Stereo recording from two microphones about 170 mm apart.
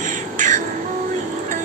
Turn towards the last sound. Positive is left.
turn(degrees=-45)  # may be behind; listen again after turning